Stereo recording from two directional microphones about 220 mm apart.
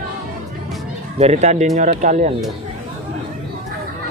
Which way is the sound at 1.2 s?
30° right (ahead or behind).